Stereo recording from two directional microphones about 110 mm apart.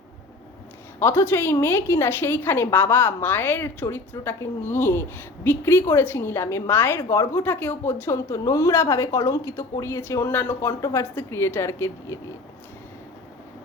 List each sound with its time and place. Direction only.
0.9 s a woman's voice: 20° left (ahead or behind)